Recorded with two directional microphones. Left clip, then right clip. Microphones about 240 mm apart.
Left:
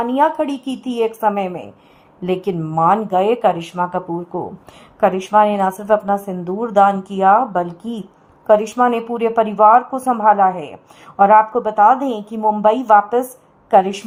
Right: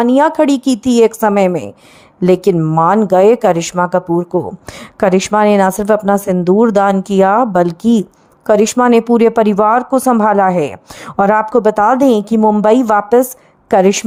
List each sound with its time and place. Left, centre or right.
0.0 s speech: right